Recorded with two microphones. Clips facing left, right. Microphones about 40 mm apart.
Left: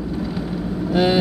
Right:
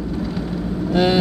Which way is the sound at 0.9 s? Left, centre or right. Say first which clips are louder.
Even; centre.